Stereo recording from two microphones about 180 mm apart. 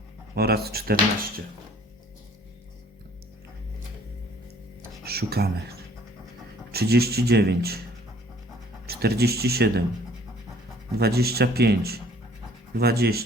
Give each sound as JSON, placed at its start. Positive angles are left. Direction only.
{"t": 0.3, "sound": "speech", "side_deg": -60}
{"t": 5.0, "sound": "speech", "side_deg": -60}
{"t": 8.9, "sound": "speech", "side_deg": -60}
{"t": 10.9, "sound": "speech", "side_deg": -60}